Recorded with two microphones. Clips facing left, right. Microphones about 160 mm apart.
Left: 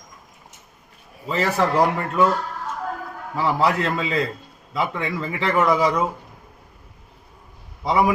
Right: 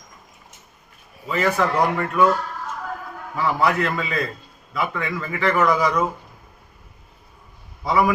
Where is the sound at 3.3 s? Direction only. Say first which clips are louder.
Even; 25° left (ahead or behind).